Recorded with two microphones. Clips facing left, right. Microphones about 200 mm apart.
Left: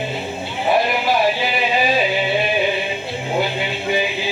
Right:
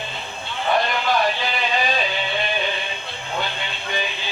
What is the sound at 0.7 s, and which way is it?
Music, 5° left (ahead or behind).